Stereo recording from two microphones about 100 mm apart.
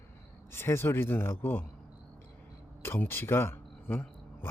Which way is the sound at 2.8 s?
25° left (ahead or behind).